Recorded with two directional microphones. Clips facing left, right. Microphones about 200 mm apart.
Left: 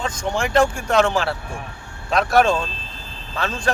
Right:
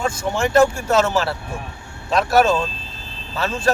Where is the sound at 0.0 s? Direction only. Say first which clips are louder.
Right 2 dB; 10° right (ahead or behind).